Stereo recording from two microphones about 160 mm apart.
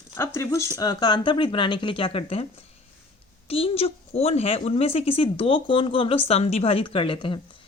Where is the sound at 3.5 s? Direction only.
35° left (ahead or behind).